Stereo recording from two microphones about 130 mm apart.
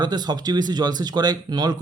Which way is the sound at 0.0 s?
35° right (ahead or behind).